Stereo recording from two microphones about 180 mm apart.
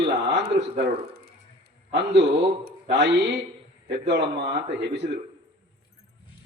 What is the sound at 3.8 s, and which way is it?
Speech, 70° right (ahead or behind).